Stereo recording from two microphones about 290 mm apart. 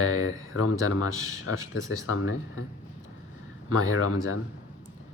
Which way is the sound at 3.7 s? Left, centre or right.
Left.